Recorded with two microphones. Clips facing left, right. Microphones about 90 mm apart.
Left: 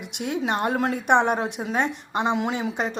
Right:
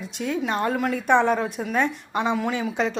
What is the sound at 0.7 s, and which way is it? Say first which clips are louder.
A woman's voice: even; 35° left (ahead or behind).